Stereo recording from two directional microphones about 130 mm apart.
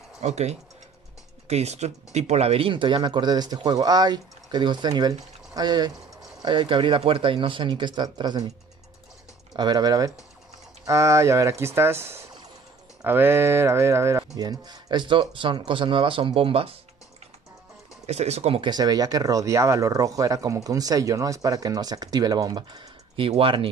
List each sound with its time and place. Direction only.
0.2 s speech: 60° right (ahead or behind); by 8.5 s 35° right (ahead or behind)
9.6 s speech: 30° right (ahead or behind)
18.0 s speech: 55° right (ahead or behind)
18.6 s speech: 30° right (ahead or behind)